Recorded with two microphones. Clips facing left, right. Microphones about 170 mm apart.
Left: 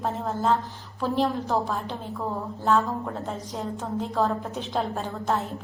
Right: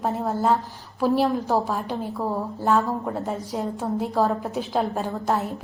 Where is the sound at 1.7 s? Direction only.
10° right (ahead or behind).